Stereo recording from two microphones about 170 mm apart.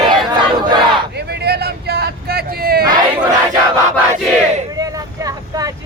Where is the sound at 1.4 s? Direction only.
70° right (ahead or behind).